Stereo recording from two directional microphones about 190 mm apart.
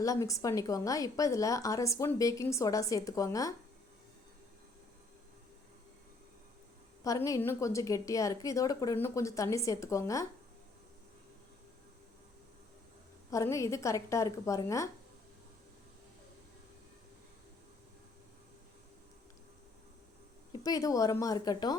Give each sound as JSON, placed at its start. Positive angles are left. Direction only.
{"t": 0.0, "sound": "a woman's voice", "side_deg": 15}
{"t": 7.0, "sound": "a woman's voice", "side_deg": 15}
{"t": 13.3, "sound": "a woman's voice", "side_deg": 15}
{"t": 20.5, "sound": "a woman's voice", "side_deg": 20}